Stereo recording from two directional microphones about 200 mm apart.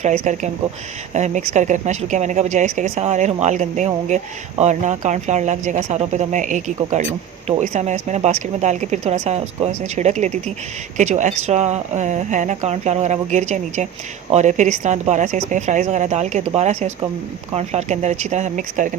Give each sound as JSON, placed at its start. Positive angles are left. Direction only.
{"t": 0.0, "sound": "speech", "side_deg": -35}